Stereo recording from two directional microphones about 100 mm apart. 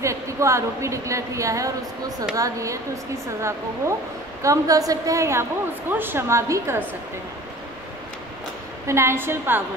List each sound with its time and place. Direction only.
0.0 s a woman's voice: 30° right (ahead or behind)
8.8 s a woman's voice: 25° right (ahead or behind)